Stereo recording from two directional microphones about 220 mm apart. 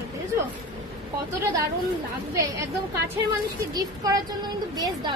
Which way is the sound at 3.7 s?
20° right (ahead or behind).